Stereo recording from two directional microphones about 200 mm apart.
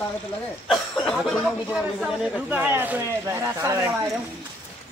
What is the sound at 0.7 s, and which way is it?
Speech, centre (ahead or behind).